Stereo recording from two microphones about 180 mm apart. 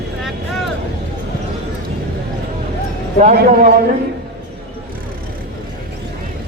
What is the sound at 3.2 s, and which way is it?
Speech, 40° right (ahead or behind).